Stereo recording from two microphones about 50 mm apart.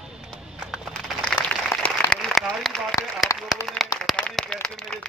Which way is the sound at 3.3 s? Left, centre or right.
Left.